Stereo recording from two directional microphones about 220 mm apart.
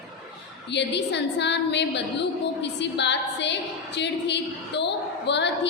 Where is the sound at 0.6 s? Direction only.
50° left (ahead or behind).